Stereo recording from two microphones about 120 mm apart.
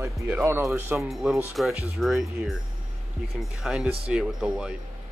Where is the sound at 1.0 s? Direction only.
Centre (ahead or behind).